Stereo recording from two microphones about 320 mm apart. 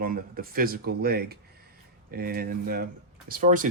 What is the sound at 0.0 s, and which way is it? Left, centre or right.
Speech, right.